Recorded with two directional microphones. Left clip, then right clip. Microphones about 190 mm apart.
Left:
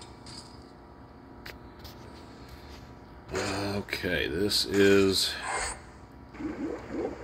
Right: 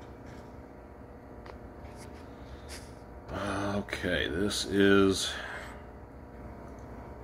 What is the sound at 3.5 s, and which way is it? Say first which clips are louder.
Speech: left 1 dB; 15° left (ahead or behind).